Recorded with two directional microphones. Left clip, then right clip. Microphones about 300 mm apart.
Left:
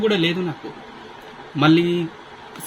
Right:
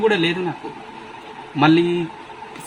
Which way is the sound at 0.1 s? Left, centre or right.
Centre.